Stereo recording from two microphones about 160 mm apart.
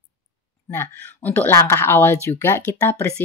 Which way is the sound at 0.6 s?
15° left (ahead or behind).